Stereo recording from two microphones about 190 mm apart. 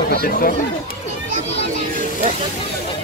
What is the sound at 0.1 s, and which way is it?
Speech, 50° left (ahead or behind).